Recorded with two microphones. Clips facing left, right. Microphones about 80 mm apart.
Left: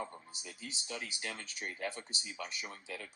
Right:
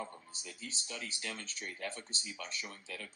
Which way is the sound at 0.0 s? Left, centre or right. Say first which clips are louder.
Left 1 dB; centre.